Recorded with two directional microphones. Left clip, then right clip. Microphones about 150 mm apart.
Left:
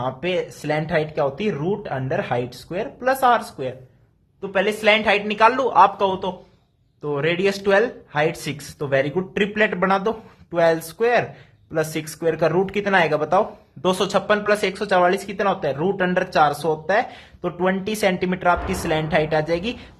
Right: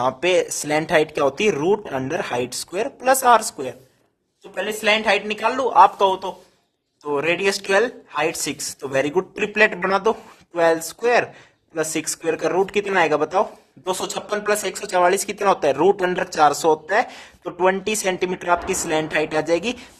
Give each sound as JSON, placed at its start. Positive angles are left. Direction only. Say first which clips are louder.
{"t": 0.0, "sound": "speech", "louder": "right 5 dB", "side_deg": -55}
{"t": 4.5, "sound": "speech", "louder": "left 2 dB", "side_deg": -30}